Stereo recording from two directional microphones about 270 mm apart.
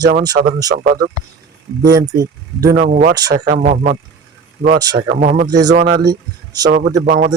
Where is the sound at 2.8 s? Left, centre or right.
Right.